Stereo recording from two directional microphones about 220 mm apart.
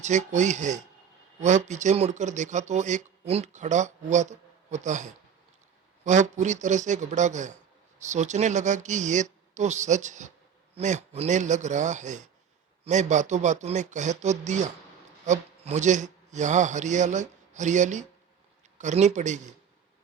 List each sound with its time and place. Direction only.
0.0 s speech: 30° right (ahead or behind)